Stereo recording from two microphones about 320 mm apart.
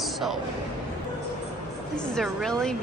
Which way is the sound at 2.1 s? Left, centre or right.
Centre.